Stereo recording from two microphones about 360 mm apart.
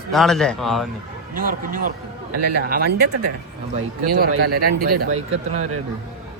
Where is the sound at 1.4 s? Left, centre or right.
Right.